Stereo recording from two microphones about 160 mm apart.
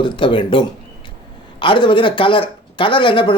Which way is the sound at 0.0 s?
30° left (ahead or behind).